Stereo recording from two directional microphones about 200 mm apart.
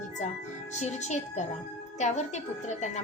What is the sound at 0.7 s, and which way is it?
A woman's voice, 35° left (ahead or behind).